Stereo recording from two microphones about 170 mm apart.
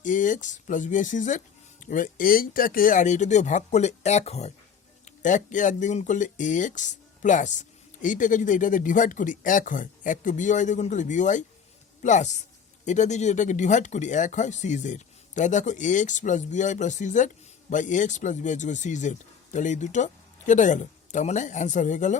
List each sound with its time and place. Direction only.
0.0 s speech: 50° left (ahead or behind)